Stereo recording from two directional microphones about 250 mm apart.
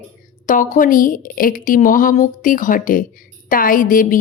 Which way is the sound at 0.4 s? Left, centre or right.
Left.